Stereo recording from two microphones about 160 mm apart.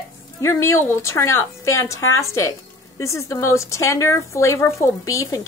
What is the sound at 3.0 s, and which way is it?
Speech, 20° left (ahead or behind).